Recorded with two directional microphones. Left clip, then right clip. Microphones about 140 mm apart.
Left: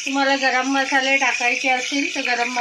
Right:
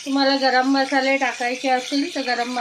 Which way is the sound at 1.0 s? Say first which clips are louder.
Left 2 dB; 25° right (ahead or behind).